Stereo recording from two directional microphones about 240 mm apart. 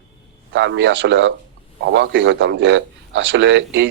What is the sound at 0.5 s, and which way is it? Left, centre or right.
A man's voice, right.